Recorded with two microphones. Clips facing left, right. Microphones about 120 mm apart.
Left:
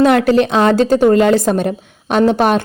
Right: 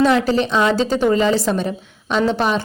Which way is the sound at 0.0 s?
60° left (ahead or behind).